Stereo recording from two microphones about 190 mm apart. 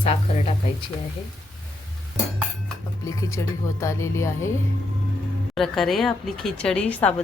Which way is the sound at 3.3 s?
15° left (ahead or behind).